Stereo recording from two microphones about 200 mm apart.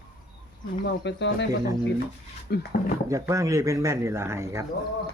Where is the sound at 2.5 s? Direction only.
50° left (ahead or behind).